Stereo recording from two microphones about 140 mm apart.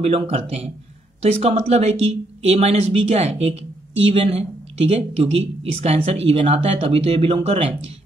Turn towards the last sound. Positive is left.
turn(degrees=-45)  # may be behind; listen again after turning